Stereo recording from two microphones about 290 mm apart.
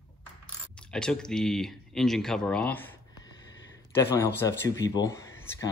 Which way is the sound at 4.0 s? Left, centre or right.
Centre.